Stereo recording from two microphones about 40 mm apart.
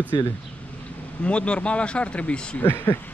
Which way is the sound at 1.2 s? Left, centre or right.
Left.